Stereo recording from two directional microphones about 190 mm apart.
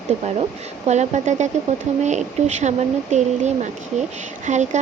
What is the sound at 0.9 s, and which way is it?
Speech, 35° right (ahead or behind).